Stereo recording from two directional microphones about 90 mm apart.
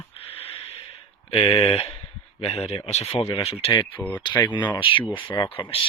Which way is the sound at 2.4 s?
90° left.